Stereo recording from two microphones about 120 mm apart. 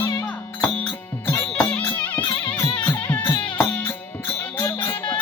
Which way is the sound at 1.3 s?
20° left (ahead or behind).